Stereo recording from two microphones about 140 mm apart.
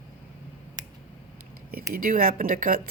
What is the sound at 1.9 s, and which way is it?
Speech, 80° right.